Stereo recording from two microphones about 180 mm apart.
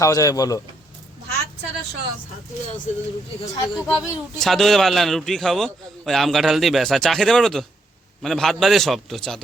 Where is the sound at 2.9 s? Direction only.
40° left (ahead or behind).